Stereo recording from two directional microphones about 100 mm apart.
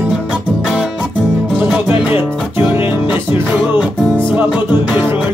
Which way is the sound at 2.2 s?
5° left (ahead or behind).